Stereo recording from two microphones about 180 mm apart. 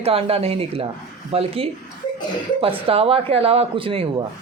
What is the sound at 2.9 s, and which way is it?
A woman's voice, 30° right (ahead or behind).